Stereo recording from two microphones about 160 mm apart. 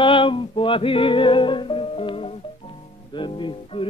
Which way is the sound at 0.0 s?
30° left (ahead or behind).